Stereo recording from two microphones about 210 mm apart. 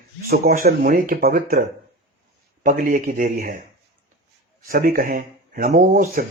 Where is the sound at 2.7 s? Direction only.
40° right (ahead or behind).